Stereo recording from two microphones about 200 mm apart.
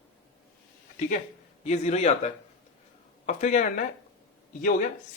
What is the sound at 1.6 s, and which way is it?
Speech, 35° left (ahead or behind).